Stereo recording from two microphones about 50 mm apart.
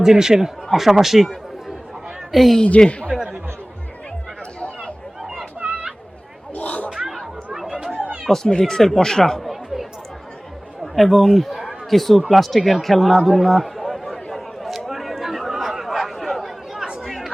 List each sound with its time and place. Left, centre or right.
0.0 s a woman's voice: centre
2.8 s speech: centre
5.2 s music: centre
6.5 s a sound: left
7.5 s chatter: centre
8.3 s speech: centre
9.5 s chatter: centre
10.9 s a man's voice: centre
12.3 s chatter: centre